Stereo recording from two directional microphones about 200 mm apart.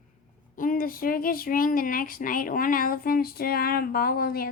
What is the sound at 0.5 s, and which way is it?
A woman's voice, 40° left (ahead or behind).